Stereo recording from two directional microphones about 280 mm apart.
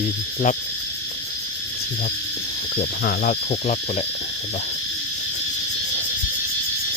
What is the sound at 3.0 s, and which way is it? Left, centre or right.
Speech, left.